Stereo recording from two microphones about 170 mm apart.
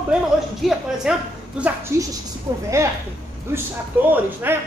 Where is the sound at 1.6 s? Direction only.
15° right (ahead or behind).